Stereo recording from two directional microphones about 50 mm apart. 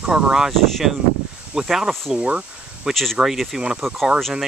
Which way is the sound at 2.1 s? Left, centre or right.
Centre.